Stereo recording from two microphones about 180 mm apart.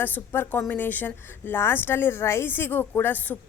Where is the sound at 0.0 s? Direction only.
10° left (ahead or behind).